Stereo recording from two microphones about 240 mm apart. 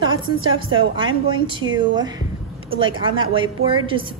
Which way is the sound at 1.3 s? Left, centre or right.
Right.